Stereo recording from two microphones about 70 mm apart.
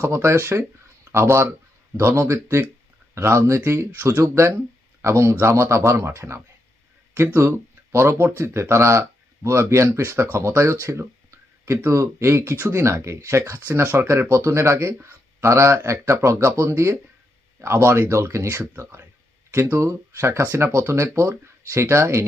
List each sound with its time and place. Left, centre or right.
0.0 s speech: right